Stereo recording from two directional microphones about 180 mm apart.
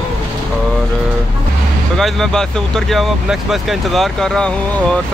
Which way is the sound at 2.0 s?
Centre (ahead or behind).